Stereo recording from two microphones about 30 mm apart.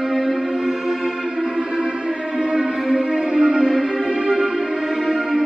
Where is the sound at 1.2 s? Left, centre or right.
Right.